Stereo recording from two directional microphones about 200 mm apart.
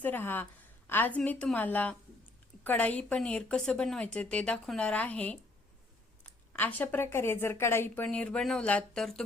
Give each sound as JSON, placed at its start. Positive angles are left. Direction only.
{"t": 0.0, "sound": "a woman's voice", "side_deg": 10}